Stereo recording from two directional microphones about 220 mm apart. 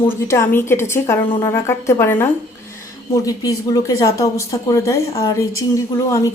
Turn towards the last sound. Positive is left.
turn(degrees=15)  # may be behind; listen again after turning